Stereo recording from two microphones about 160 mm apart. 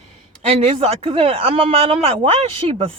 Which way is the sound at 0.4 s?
35° right (ahead or behind).